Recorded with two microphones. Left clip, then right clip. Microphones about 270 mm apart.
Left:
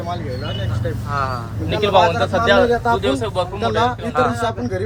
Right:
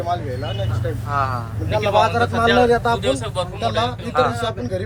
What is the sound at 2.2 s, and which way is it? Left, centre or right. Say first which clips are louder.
Speech: left 1 dB; left.